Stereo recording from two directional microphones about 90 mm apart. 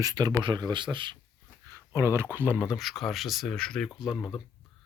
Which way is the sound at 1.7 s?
30° right (ahead or behind).